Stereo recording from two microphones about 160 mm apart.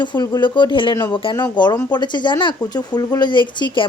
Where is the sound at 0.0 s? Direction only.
25° left (ahead or behind).